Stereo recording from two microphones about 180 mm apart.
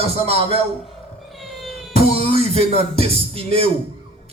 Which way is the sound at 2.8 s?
30° right (ahead or behind).